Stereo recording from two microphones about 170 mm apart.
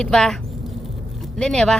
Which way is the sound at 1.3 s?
5° left (ahead or behind).